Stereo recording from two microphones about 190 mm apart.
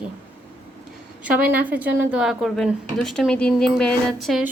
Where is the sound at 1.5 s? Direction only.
10° right (ahead or behind).